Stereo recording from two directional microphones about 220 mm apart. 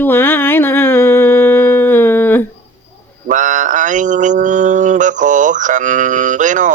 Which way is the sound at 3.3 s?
35° right (ahead or behind).